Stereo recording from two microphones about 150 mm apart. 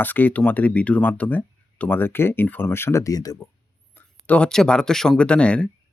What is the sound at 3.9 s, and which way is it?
Speech, 10° left (ahead or behind).